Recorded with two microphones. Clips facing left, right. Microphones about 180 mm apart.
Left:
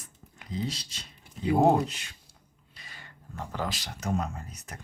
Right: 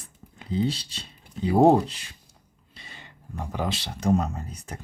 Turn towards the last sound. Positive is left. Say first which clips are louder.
# right 5 dB
turn(degrees=-30)  # may be behind; listen again after turning